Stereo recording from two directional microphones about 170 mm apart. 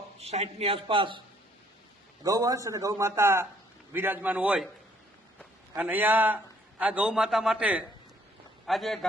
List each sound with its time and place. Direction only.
0.2 s a man's voice: 35° right (ahead or behind)
2.2 s a man's voice: 20° right (ahead or behind)
5.7 s a man's voice: 10° right (ahead or behind)